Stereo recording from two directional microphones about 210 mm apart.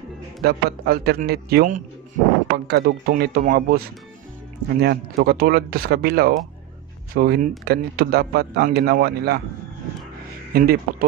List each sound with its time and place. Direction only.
0.4 s a man's voice: 50° right (ahead or behind)
4.8 s a man's voice: 50° right (ahead or behind)
10.5 s speech: 45° right (ahead or behind)